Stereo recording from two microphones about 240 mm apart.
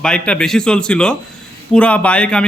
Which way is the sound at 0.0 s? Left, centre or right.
Centre.